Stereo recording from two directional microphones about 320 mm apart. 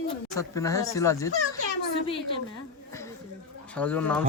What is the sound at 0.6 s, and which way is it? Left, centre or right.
Speech, centre.